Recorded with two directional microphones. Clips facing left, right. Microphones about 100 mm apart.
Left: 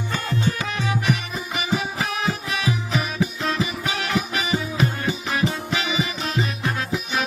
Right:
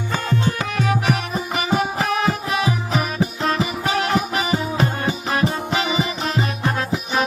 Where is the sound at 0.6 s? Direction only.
50° right (ahead or behind).